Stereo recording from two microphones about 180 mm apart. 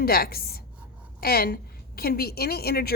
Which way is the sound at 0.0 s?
55° left (ahead or behind).